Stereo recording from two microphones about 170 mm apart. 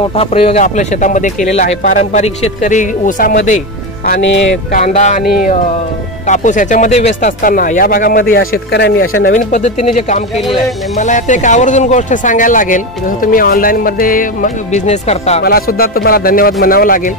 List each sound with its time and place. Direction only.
0.1 s speech: 35° left (ahead or behind); by 5.5 s 60° left (ahead or behind)
6.2 s speech: 45° left (ahead or behind); by 9.3 s 75° left (ahead or behind)
9.3 s speech: 45° left (ahead or behind)
15.4 s speech: 60° left (ahead or behind)